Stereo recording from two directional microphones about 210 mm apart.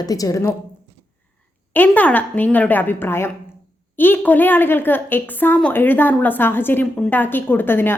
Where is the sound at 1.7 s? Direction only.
10° left (ahead or behind).